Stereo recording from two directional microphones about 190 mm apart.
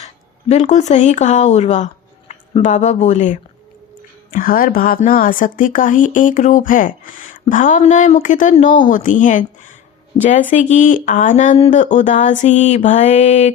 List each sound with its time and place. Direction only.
0.0 s speech: 35° left (ahead or behind)